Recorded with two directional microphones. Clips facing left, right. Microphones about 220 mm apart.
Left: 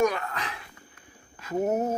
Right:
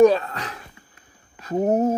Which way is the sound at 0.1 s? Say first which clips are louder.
Right 9 dB; 40° right (ahead or behind).